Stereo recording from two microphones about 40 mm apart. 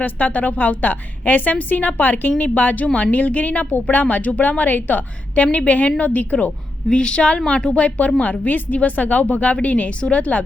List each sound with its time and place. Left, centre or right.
0.0 s a woman's voice: left
6.9 s a woman's voice: left
7.8 s a woman's voice: left
8.2 s a woman's voice: left